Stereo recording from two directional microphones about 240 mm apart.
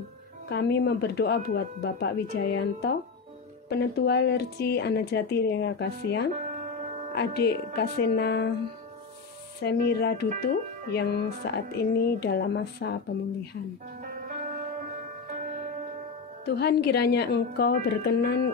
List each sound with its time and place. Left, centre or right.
0.5 s speech: left
9.6 s speech: left
16.4 s speech: left